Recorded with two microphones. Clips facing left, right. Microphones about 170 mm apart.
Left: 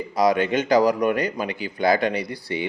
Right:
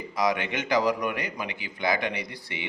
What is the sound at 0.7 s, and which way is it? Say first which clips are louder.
Speech: left 5 dB; 35° left (ahead or behind).